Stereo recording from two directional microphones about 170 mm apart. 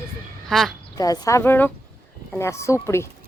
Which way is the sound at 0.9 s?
20° left (ahead or behind).